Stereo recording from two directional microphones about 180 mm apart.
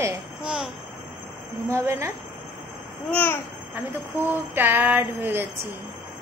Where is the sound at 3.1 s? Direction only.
10° left (ahead or behind).